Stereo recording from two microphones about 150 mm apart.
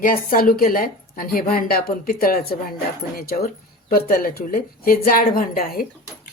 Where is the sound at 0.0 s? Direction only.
75° left (ahead or behind).